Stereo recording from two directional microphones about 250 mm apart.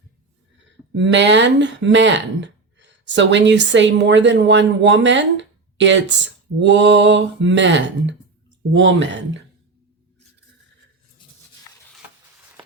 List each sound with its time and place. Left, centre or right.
0.9 s speech: right